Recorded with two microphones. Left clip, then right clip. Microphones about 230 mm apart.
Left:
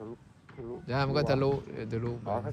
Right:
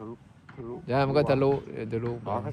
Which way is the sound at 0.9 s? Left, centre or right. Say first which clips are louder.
Right 5 dB; centre.